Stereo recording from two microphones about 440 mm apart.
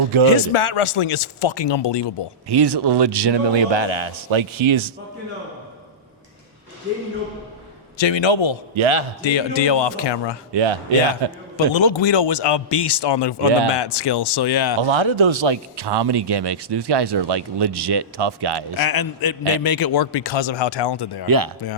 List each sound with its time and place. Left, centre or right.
0.3 s speech: left
2.5 s a man's voice: right
7.9 s a man's voice: left
8.7 s a man's voice: right
9.2 s a man's voice: left
10.5 s speech: right
11.5 s a man's voice: left
14.8 s a man's voice: right
18.8 s a man's voice: left
21.2 s speech: right